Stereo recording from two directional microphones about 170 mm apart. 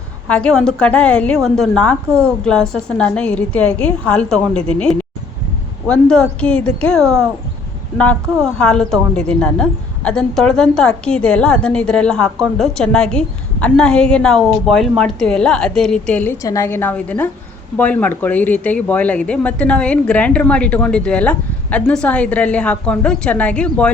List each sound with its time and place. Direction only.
0.3 s a woman's voice: 5° left (ahead or behind)
16.4 s speech: 20° left (ahead or behind)